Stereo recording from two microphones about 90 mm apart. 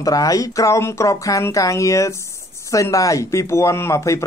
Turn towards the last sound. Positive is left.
turn(degrees=35)  # may be behind; listen again after turning